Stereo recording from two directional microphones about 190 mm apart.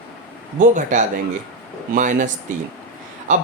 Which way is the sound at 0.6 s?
40° right (ahead or behind).